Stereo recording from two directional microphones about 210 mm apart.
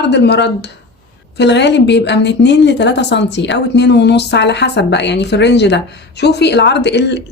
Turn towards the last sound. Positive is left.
turn(degrees=55)  # may be behind; listen again after turning